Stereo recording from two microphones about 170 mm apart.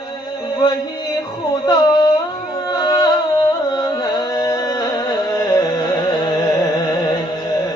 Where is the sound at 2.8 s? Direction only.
20° left (ahead or behind).